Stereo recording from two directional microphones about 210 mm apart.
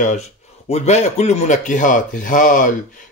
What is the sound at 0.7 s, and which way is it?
Speech, 30° left (ahead or behind).